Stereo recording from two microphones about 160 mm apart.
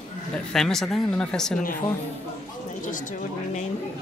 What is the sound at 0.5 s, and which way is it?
Speech, centre (ahead or behind).